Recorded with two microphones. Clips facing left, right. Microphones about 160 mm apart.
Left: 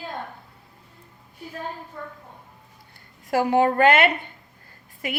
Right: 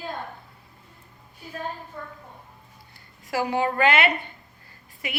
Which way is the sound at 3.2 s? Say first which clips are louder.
Left 5 dB; 50° left (ahead or behind).